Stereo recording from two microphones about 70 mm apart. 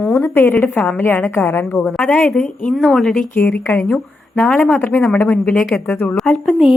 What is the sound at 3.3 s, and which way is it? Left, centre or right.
Speech, left.